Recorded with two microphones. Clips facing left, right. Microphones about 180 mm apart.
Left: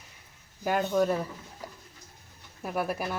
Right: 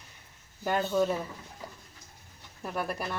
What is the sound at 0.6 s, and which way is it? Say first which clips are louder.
Speech: left 1 dB; 15° left (ahead or behind).